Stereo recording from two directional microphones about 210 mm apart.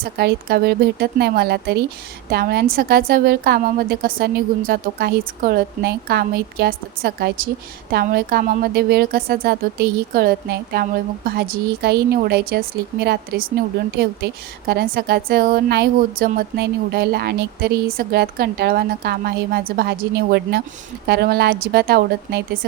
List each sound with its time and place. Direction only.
0.0 s a woman's voice: 50° right (ahead or behind)